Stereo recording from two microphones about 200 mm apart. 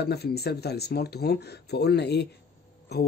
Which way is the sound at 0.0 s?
55° left (ahead or behind).